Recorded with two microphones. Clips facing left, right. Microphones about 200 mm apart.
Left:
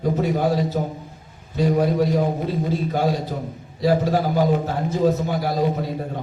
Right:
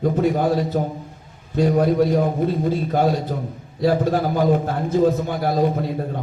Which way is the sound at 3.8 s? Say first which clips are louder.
Right 1 dB; 50° right (ahead or behind).